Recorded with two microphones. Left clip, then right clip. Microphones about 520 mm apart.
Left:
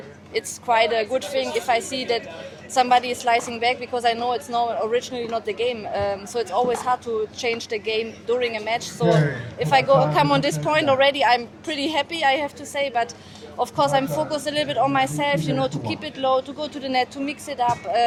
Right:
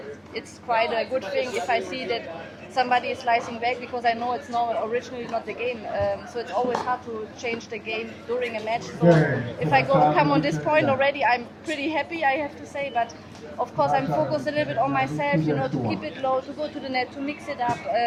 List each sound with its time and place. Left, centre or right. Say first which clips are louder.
0.3 s a woman's voice: left 5 dB; left